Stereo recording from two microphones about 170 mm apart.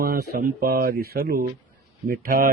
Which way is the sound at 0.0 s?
65° right (ahead or behind).